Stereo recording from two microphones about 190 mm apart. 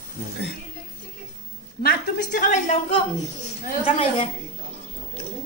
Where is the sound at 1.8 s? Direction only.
45° left (ahead or behind).